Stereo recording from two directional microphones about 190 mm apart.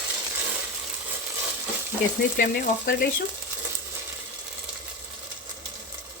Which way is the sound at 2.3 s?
55° left (ahead or behind).